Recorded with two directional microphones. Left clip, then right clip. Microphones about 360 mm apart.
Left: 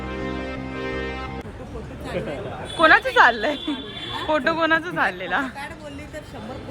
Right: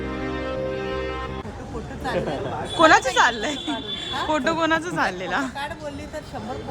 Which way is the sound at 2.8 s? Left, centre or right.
Centre.